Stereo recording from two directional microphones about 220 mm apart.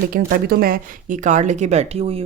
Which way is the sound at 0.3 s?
45° right (ahead or behind).